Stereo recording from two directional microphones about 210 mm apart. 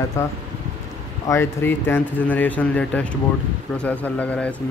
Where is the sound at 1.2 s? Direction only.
10° left (ahead or behind).